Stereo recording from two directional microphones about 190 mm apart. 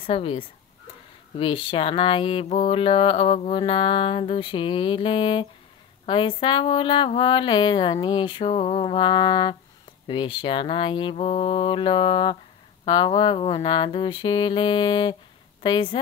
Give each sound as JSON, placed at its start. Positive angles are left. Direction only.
{"t": 0.0, "sound": "speech", "side_deg": 30}